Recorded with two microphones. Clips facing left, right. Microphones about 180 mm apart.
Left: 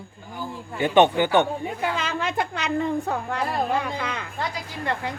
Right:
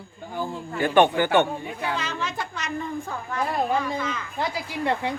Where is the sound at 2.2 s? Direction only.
60° left (ahead or behind).